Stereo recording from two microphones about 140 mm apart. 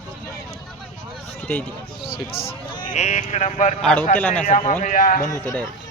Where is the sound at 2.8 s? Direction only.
60° left (ahead or behind).